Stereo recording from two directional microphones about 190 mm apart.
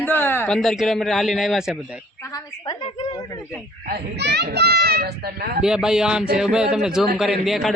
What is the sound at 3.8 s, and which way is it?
Speech, 60° right (ahead or behind).